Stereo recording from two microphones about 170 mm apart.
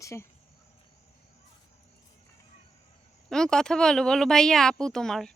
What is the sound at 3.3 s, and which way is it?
A woman's voice, 5° left (ahead or behind).